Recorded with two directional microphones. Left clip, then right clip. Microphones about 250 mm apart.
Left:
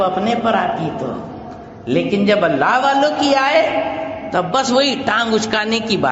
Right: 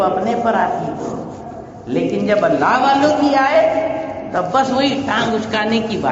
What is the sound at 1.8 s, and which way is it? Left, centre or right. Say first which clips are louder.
A woman's voice: left 2 dB; left.